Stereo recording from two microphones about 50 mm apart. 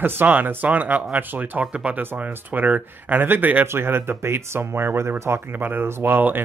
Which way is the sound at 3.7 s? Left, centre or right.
Right.